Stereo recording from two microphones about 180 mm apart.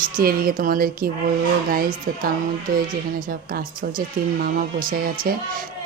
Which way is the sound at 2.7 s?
50° right (ahead or behind).